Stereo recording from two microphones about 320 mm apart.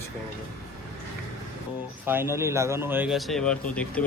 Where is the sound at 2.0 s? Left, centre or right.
Centre.